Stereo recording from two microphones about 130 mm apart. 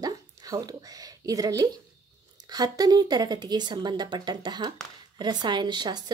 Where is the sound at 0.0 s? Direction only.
30° right (ahead or behind).